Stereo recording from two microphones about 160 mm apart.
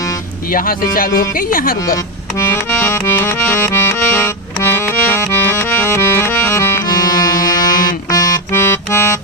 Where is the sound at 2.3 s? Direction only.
15° left (ahead or behind).